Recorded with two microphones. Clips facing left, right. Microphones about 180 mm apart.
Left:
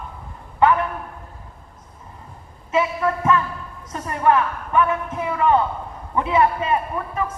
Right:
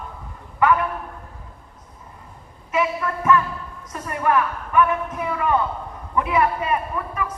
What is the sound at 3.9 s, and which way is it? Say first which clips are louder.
Speech: left 3 dB; 30° left (ahead or behind).